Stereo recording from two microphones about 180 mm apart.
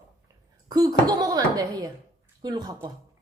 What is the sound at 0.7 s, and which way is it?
Speech, 20° right (ahead or behind).